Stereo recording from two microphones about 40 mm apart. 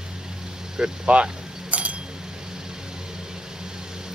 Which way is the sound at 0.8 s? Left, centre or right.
Centre.